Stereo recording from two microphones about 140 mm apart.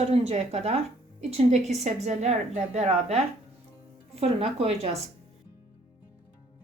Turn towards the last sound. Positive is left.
turn(degrees=-50)  # may be behind; listen again after turning